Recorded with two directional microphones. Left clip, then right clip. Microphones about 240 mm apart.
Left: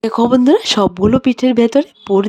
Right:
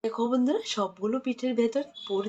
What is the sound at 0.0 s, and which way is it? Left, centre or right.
Speech, left.